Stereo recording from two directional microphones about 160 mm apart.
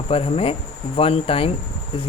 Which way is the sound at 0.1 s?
35° left (ahead or behind).